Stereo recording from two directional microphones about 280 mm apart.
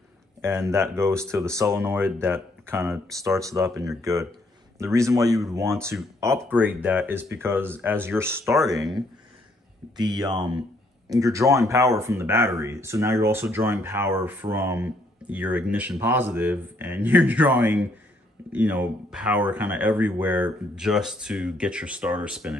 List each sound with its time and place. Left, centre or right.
0.4 s speech: centre
9.9 s speech: centre